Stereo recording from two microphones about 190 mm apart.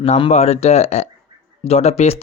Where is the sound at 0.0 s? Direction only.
35° left (ahead or behind).